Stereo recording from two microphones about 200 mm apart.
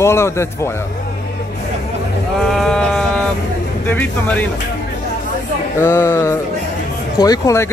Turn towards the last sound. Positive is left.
turn(degrees=15)  # may be behind; listen again after turning